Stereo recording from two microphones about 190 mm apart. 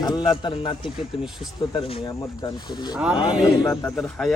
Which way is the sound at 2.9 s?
5° right (ahead or behind).